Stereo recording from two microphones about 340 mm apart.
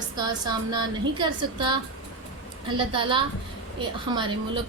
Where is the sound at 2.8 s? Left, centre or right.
Centre.